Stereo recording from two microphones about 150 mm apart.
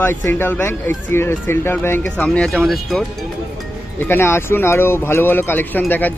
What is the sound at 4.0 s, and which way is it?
Speech, 15° left (ahead or behind).